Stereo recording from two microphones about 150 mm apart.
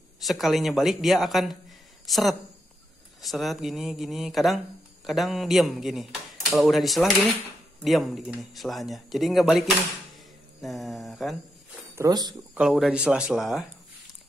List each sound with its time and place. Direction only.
0.2 s a woman's voice: centre (ahead or behind)
11.9 s speech: 20° right (ahead or behind)
12.5 s speech: centre (ahead or behind)